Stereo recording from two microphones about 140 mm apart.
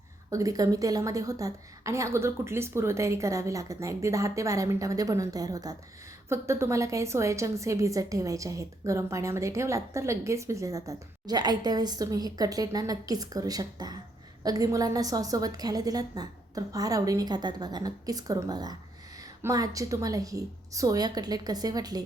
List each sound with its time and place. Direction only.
0.3 s a woman's voice: 25° right (ahead or behind)